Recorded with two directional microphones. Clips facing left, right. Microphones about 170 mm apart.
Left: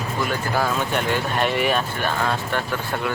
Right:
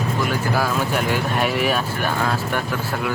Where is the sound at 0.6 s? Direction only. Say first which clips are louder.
Right 1 dB; 5° right (ahead or behind).